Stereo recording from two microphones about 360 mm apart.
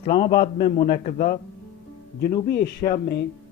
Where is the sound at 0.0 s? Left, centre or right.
Centre.